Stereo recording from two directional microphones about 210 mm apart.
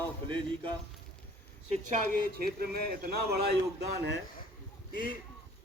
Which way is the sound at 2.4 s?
45° right (ahead or behind).